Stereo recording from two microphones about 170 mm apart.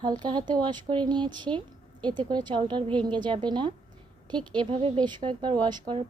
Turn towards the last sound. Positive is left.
turn(degrees=-30)  # may be behind; listen again after turning